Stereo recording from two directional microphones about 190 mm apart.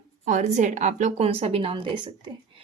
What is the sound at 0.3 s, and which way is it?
A woman's voice, 40° right (ahead or behind).